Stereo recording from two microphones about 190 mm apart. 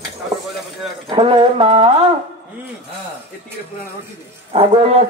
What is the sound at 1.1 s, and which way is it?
Speech, 30° right (ahead or behind).